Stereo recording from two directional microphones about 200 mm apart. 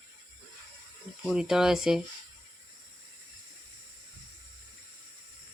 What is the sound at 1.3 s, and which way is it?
Speech, 5° right (ahead or behind).